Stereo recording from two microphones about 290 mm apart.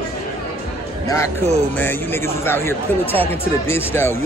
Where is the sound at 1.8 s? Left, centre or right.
Centre.